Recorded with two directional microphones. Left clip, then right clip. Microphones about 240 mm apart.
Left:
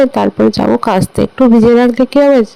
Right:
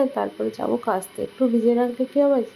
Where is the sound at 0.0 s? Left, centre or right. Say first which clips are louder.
Left 13 dB; left.